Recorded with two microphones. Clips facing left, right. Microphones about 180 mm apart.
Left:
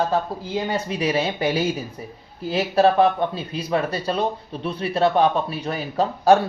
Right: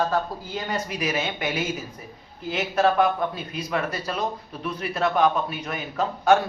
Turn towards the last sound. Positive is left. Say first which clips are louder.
# left 3 dB
turn(degrees=35)  # may be behind; listen again after turning